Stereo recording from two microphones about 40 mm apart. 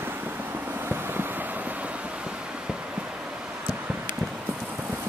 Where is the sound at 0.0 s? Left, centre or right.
Right.